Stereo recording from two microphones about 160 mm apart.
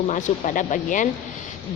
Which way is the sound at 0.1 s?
50° left (ahead or behind).